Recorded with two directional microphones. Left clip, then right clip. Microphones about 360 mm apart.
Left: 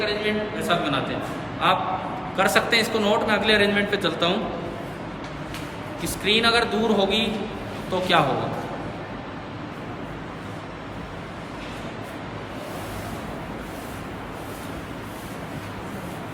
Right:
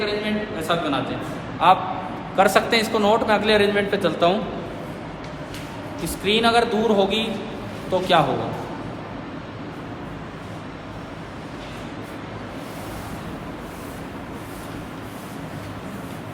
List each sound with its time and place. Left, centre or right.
0.0 s a sound: centre
1.6 s a man's voice: centre
6.2 s a man's voice: centre